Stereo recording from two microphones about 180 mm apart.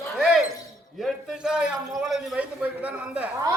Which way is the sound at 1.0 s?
Centre (ahead or behind).